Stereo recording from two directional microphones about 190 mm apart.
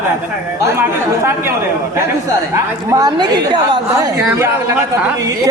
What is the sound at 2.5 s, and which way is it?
A woman's voice, 20° right (ahead or behind).